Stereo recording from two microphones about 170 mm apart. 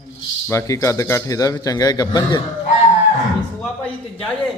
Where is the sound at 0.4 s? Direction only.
15° left (ahead or behind).